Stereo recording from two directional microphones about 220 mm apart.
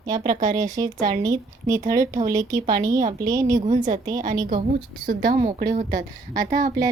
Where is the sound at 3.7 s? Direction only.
35° right (ahead or behind).